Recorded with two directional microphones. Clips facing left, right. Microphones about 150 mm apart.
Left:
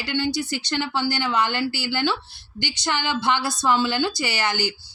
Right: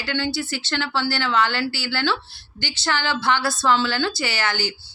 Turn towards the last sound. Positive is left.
turn(degrees=15)  # may be behind; listen again after turning